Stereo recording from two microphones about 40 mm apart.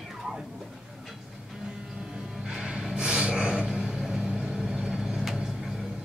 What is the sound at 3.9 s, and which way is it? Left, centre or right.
Vehicle, centre.